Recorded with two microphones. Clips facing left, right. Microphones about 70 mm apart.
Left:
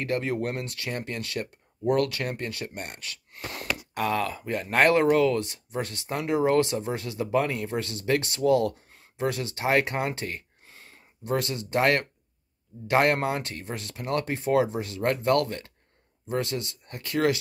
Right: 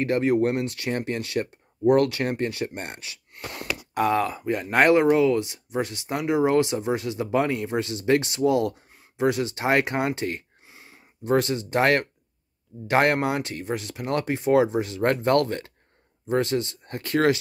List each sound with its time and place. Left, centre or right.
0.0 s speech: right
10.7 s a sound: centre
11.2 s speech: right